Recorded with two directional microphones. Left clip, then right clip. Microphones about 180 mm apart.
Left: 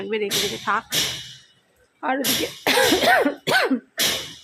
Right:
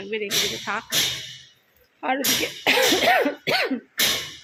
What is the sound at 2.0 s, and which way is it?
Speech, 5° left (ahead or behind).